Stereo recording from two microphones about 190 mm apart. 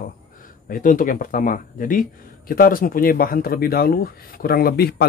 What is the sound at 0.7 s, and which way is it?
Speech, 45° left (ahead or behind).